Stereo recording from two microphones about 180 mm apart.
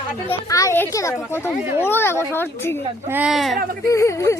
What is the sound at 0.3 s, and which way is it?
A child's voice, 15° left (ahead or behind).